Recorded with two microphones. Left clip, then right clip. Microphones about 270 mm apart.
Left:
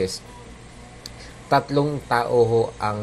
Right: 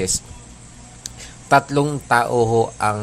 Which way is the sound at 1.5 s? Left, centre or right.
Right.